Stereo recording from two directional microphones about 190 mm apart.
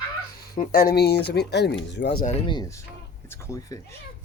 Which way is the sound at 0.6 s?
55° left (ahead or behind).